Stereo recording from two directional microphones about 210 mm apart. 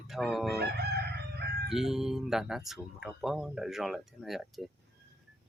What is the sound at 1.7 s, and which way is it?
Speech, centre (ahead or behind).